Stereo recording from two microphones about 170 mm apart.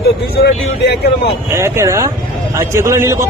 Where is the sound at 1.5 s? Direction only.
15° right (ahead or behind).